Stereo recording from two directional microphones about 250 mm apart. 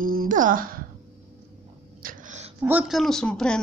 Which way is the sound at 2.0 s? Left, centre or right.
Right.